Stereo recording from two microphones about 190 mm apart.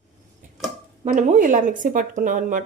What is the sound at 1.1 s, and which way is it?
A woman's voice, 40° right (ahead or behind).